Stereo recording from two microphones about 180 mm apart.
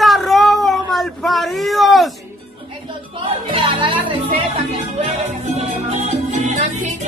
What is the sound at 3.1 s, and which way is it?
Music, 30° right (ahead or behind).